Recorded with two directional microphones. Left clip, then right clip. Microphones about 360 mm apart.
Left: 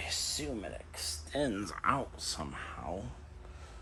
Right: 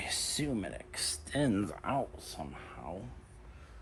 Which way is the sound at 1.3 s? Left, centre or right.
Centre.